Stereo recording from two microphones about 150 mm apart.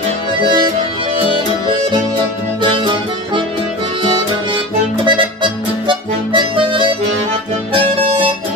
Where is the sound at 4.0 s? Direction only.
35° right (ahead or behind).